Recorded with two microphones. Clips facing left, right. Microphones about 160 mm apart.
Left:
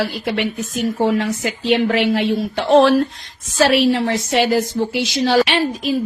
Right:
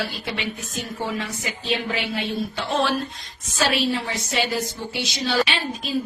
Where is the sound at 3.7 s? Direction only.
75° left (ahead or behind).